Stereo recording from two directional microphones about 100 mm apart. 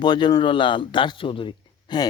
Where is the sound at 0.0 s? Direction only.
45° left (ahead or behind).